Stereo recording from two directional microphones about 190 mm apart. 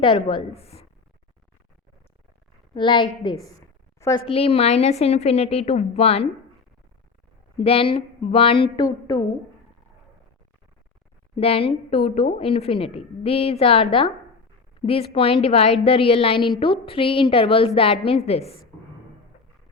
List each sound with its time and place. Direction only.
0.0 s a woman's voice: 25° left (ahead or behind)
2.7 s a woman's voice: 25° left (ahead or behind)
4.3 s a woman's voice: 30° left (ahead or behind)
7.6 s a woman's voice: 30° left (ahead or behind)
11.3 s a woman's voice: 30° left (ahead or behind)